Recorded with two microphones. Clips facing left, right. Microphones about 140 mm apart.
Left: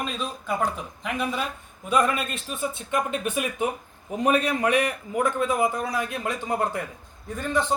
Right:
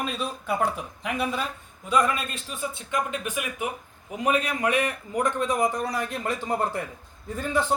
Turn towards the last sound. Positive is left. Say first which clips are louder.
# even
turn(degrees=-5)  # may be behind; listen again after turning